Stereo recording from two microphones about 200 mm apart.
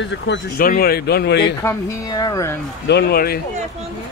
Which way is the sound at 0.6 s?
45° left (ahead or behind).